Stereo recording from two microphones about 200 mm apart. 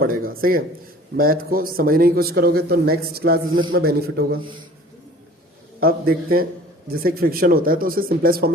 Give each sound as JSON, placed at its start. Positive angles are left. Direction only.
{"t": 0.0, "sound": "a man's voice", "side_deg": -45}
{"t": 5.8, "sound": "a man's voice", "side_deg": -50}